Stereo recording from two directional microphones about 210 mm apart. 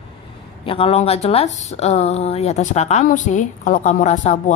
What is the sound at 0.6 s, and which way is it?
Speech, 25° left (ahead or behind).